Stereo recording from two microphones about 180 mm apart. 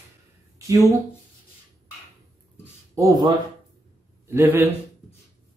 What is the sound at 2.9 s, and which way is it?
Speech, 20° right (ahead or behind).